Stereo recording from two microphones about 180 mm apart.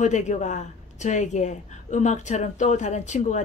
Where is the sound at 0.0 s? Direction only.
40° left (ahead or behind).